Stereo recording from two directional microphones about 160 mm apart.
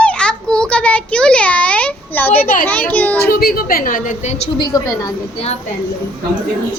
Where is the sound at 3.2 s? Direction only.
70° left (ahead or behind); by 4.4 s 45° left (ahead or behind).